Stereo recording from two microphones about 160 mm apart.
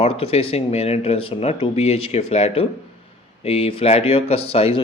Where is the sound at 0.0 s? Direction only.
40° left (ahead or behind).